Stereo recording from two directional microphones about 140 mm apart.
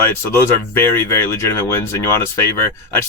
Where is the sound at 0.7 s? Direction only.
15° left (ahead or behind).